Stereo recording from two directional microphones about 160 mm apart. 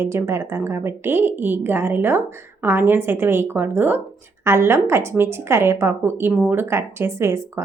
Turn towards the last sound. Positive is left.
turn(degrees=-15)  # may be behind; listen again after turning